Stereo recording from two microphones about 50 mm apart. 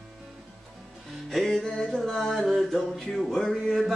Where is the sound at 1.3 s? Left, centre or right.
Centre.